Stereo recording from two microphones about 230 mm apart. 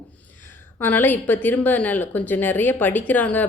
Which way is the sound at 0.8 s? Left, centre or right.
Centre.